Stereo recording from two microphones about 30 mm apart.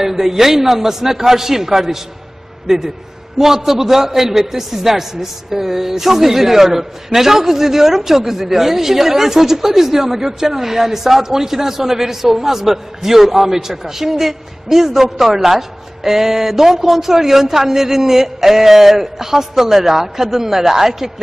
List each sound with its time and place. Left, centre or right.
0.0 s a man's voice: centre